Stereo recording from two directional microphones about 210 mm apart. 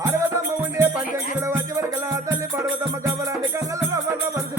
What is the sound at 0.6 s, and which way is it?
Music, 10° right (ahead or behind).